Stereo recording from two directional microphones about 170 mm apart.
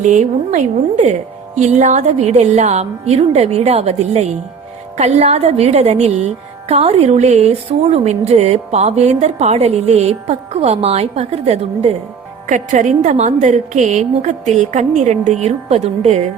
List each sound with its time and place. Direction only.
0.0 s a woman's voice: 45° right (ahead or behind)